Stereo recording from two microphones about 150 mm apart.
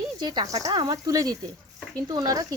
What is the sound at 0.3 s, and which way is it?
Speech, 30° right (ahead or behind).